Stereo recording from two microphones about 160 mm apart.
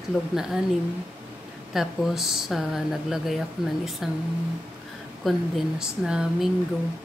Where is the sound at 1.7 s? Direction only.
Centre (ahead or behind).